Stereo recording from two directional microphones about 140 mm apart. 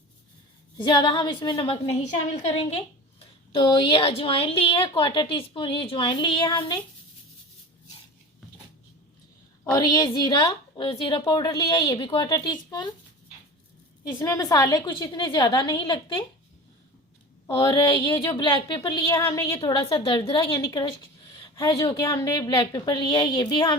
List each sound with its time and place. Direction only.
0.8 s a woman's voice: 35° left (ahead or behind)
3.5 s a woman's voice: 35° left (ahead or behind)
9.6 s a woman's voice: 25° left (ahead or behind)
14.2 s a woman's voice: 25° left (ahead or behind)
17.5 s a woman's voice: 35° left (ahead or behind)
18.1 s a woman's voice: 20° left (ahead or behind)
19.0 s a woman's voice: 20° left (ahead or behind)
19.6 s a woman's voice: 40° left (ahead or behind)
21.8 s a woman's voice: 25° left (ahead or behind)